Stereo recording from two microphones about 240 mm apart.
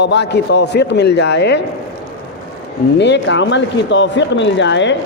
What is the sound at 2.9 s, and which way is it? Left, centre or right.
A man's voice, left.